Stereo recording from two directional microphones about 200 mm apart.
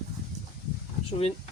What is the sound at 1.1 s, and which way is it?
Speech, 30° left (ahead or behind).